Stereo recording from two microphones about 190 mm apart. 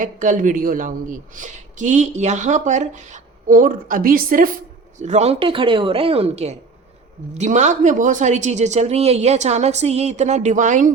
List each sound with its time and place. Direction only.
0.0 s speech: 40° right (ahead or behind)